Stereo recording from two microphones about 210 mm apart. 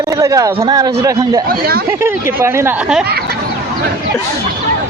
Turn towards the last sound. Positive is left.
turn(degrees=-10)  # may be behind; listen again after turning